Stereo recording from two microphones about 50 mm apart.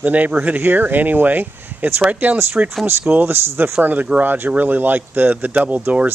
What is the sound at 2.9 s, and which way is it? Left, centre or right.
Speech, right.